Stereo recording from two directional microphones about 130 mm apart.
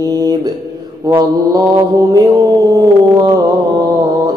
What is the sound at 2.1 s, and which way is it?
Mantra, 30° right (ahead or behind).